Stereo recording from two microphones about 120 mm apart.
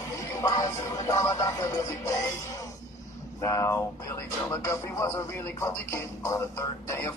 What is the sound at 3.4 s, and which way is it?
Speech, 25° left (ahead or behind).